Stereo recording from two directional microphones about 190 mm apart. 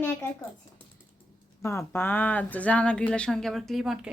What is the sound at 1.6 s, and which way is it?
Speech, 15° left (ahead or behind).